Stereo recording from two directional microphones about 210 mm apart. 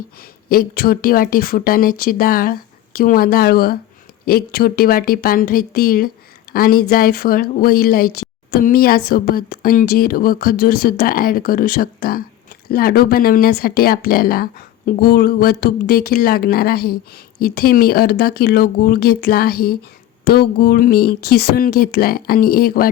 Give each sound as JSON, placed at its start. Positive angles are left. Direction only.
{"t": 0.4, "sound": "speech", "side_deg": 45}